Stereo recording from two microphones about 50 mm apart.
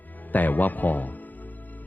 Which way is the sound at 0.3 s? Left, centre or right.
Left.